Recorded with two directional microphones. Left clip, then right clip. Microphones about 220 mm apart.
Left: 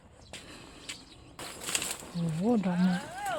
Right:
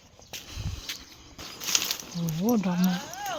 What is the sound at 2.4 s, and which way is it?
Speech, 15° right (ahead or behind).